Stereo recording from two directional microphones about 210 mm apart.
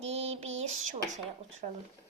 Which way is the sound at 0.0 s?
30° right (ahead or behind).